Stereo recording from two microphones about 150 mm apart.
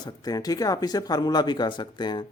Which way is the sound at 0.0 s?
25° left (ahead or behind).